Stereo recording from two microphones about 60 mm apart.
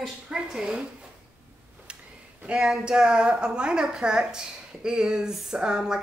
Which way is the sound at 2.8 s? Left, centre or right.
Centre.